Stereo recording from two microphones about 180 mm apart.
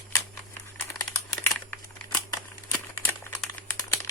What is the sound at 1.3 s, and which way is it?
Computer keyboard, 15° left (ahead or behind).